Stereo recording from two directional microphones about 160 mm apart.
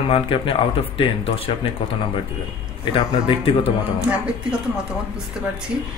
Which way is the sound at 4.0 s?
5° right (ahead or behind).